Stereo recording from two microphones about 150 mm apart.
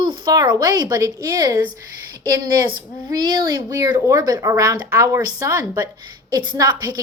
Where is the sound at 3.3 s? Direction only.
20° right (ahead or behind).